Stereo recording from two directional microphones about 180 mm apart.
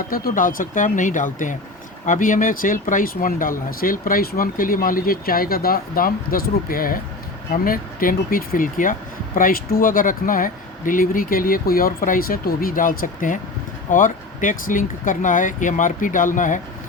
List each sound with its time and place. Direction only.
0.1 s speech: 50° left (ahead or behind)